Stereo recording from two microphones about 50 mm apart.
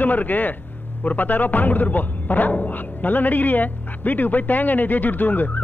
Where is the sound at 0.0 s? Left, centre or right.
Left.